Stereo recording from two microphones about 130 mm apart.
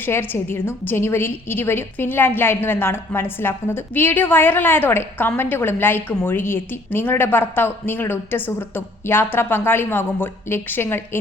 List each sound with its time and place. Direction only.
0.0 s a woman's voice: 15° left (ahead or behind)